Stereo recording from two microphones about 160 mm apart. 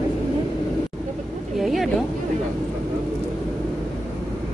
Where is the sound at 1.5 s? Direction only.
Centre (ahead or behind).